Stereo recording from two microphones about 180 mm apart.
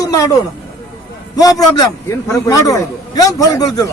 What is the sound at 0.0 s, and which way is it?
Speech, 20° left (ahead or behind).